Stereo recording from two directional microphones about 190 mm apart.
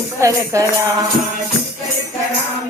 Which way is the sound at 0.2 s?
15° right (ahead or behind).